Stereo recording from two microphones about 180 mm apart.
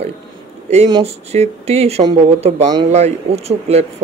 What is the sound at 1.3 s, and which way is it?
Speech, 35° right (ahead or behind).